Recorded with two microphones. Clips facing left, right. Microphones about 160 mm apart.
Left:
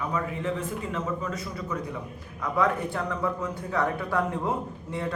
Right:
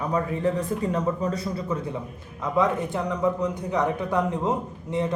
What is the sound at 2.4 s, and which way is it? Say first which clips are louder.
A man's voice: right 3 dB; 20° right (ahead or behind).